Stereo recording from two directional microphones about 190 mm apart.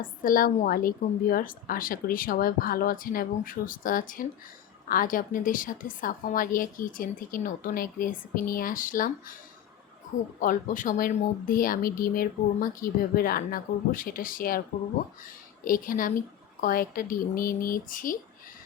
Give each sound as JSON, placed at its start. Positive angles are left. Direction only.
{"t": 0.0, "sound": "a woman's voice", "side_deg": 45}
{"t": 10.4, "sound": "a woman's voice", "side_deg": 45}
{"t": 15.6, "sound": "a woman's voice", "side_deg": 45}